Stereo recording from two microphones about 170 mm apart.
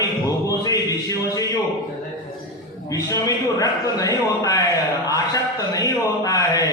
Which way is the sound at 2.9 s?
20° left (ahead or behind).